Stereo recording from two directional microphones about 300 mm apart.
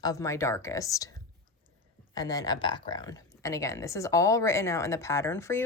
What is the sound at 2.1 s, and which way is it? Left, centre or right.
Speech, centre.